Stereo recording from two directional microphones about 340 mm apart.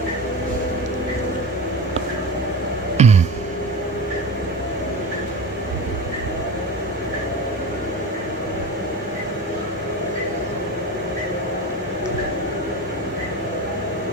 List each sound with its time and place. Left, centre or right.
3.0 s music: centre